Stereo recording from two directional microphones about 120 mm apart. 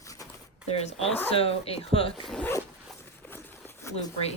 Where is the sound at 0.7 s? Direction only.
60° left (ahead or behind).